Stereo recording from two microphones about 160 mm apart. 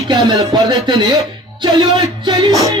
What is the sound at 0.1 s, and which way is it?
Music, 25° right (ahead or behind).